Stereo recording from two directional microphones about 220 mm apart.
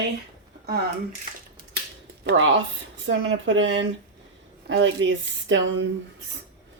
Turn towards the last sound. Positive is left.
turn(degrees=-60)  # may be behind; listen again after turning